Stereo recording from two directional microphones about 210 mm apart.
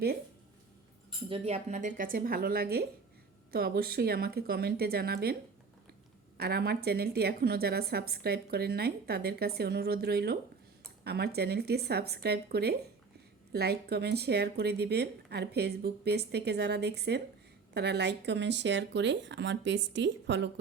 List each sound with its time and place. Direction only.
1.3 s a woman's voice: 30° right (ahead or behind); by 20.5 s 55° right (ahead or behind)